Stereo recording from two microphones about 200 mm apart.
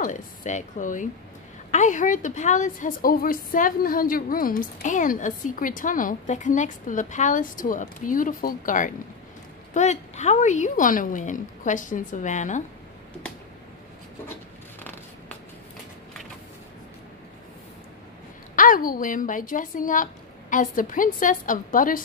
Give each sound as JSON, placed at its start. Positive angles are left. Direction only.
{"t": 0.0, "sound": "a woman's voice", "side_deg": 35}
{"t": 14.8, "sound": "a sound", "side_deg": 10}
{"t": 18.6, "sound": "a woman's voice", "side_deg": 45}